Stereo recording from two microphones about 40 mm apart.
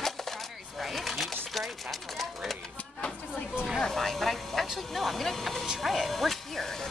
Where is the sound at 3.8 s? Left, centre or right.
Centre.